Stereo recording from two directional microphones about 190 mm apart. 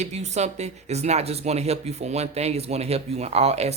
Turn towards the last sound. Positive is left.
turn(degrees=-35)  # may be behind; listen again after turning